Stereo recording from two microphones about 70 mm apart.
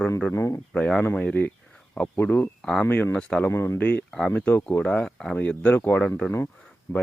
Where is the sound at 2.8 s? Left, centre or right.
Left.